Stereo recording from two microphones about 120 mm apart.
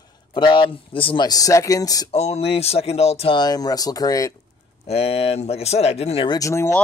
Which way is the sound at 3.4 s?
35° left (ahead or behind).